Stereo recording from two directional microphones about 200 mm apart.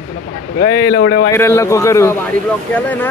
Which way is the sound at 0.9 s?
60° left (ahead or behind).